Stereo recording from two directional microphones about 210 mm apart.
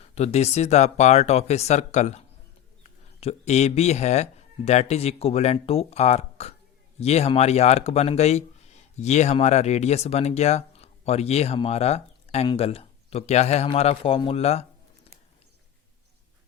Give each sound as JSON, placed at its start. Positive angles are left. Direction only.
{"t": 0.0, "sound": "speech", "side_deg": 30}